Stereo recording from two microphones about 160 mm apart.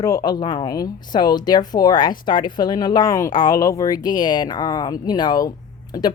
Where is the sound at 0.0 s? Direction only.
25° left (ahead or behind).